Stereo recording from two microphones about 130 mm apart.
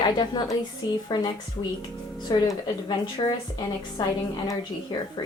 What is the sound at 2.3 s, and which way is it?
A woman's voice, 35° left (ahead or behind).